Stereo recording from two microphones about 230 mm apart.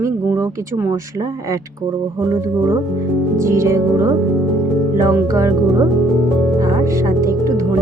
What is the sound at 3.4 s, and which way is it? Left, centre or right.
Speech, centre.